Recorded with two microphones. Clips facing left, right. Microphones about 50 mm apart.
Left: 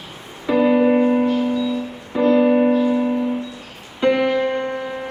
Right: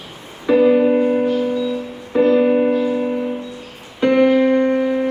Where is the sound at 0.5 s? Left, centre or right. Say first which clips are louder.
Right 2 dB; centre.